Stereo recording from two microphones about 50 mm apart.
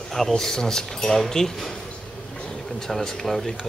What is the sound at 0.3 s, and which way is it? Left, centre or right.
Speech, centre.